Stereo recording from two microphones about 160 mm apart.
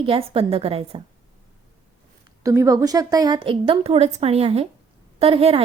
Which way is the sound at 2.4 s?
20° right (ahead or behind).